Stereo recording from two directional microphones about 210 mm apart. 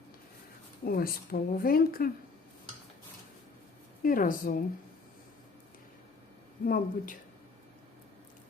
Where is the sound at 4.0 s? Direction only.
40° left (ahead or behind).